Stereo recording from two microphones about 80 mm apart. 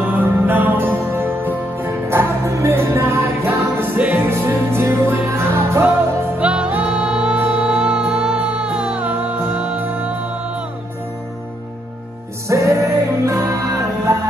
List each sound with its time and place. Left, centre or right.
0.0 s music: right
6.4 s music: centre
9.4 s music: right
12.4 s music: right